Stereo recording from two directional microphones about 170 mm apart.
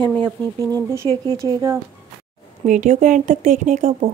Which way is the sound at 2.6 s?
45° right (ahead or behind).